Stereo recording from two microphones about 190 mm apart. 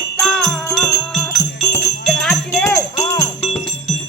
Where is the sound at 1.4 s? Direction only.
15° left (ahead or behind).